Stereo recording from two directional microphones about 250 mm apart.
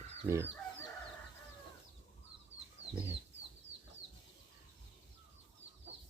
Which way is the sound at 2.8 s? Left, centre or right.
Left.